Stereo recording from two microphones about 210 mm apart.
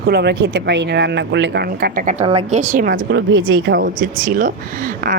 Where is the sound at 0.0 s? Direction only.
50° right (ahead or behind).